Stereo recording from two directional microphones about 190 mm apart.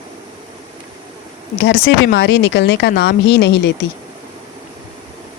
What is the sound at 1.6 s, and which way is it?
Speech, 60° left (ahead or behind).